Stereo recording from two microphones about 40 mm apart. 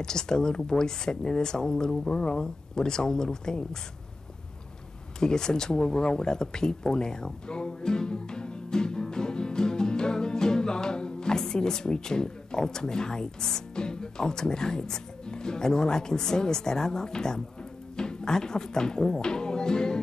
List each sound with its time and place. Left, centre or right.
0.0 s speech: centre
5.2 s speech: centre